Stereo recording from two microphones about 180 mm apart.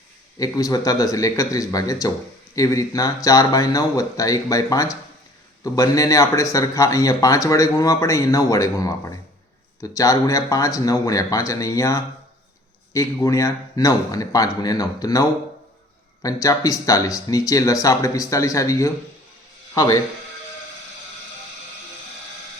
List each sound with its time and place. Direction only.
0.3 s speech: 20° left (ahead or behind)